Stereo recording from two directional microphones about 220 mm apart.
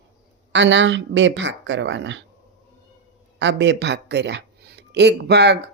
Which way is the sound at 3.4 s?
55° right (ahead or behind).